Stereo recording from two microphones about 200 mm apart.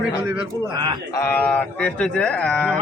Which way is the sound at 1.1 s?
10° left (ahead or behind).